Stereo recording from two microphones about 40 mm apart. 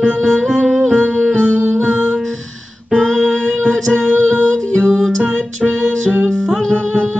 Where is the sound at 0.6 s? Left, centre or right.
Centre.